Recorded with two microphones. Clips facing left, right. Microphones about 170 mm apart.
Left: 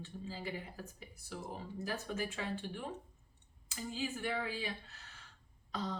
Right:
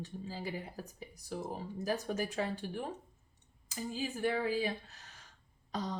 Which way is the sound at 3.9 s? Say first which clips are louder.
Right 4 dB; 40° right (ahead or behind).